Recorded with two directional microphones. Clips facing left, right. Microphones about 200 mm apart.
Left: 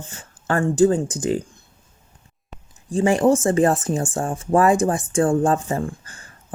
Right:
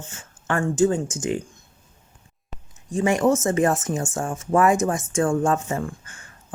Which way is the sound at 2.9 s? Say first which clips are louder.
Left 3 dB; 30° left (ahead or behind).